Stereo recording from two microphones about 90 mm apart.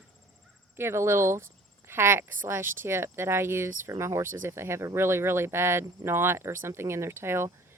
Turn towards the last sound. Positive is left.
turn(degrees=-30)  # may be behind; listen again after turning